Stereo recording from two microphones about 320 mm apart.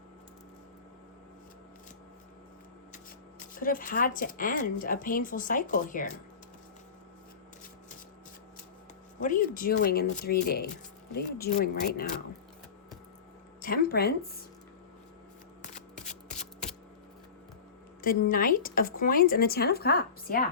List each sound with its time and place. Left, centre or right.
3.5 s speech: left
9.2 s speech: left
13.6 s speech: left
16.0 s shuffling cards: left
18.3 s speech: left